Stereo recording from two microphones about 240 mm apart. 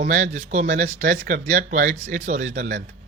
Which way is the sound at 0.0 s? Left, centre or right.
Right.